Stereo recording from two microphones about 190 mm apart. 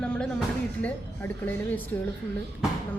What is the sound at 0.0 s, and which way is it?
Speech, 5° left (ahead or behind).